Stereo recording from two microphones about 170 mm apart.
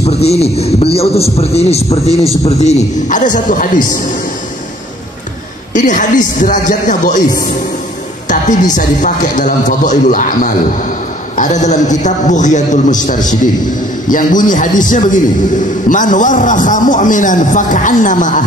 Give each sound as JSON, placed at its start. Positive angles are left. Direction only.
{"t": 0.0, "sound": "a man's voice", "side_deg": 40}
{"t": 5.7, "sound": "a man's voice", "side_deg": 50}
{"t": 8.3, "sound": "a man's voice", "side_deg": 50}